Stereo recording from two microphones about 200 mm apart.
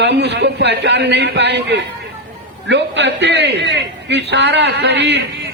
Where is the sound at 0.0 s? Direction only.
60° right (ahead or behind).